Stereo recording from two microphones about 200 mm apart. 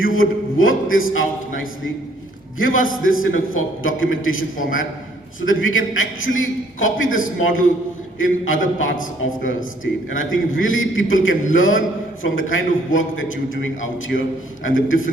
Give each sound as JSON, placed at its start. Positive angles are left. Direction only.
{"t": 0.0, "sound": "a man's voice", "side_deg": 80}
{"t": 8.2, "sound": "a man's voice", "side_deg": 75}
{"t": 14.1, "sound": "a man's voice", "side_deg": 60}
{"t": 14.6, "sound": "a man's voice", "side_deg": 75}